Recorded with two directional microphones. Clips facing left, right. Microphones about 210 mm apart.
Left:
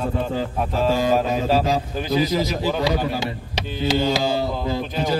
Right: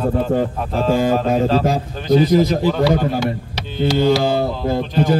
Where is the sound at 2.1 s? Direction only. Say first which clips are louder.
Right 8 dB; 55° right (ahead or behind).